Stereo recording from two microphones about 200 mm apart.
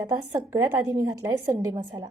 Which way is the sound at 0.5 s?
15° right (ahead or behind).